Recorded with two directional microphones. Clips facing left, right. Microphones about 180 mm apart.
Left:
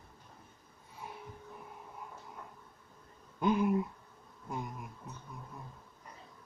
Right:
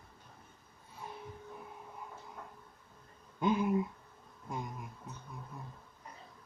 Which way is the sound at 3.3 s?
Centre (ahead or behind).